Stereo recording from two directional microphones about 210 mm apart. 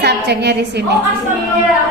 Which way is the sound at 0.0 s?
50° right (ahead or behind).